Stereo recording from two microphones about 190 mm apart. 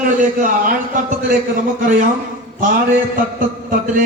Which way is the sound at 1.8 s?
45° right (ahead or behind).